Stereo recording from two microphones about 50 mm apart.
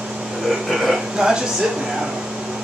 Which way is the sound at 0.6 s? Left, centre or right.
Centre.